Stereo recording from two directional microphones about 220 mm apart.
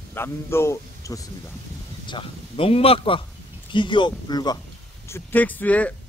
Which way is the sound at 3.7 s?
20° left (ahead or behind).